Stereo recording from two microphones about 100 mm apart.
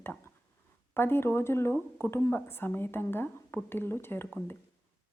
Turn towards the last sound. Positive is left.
turn(degrees=20)  # may be behind; listen again after turning